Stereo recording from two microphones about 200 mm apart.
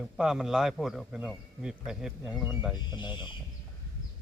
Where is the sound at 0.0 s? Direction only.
5° right (ahead or behind).